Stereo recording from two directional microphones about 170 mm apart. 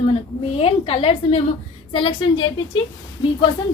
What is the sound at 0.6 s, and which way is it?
A woman's voice, 35° left (ahead or behind).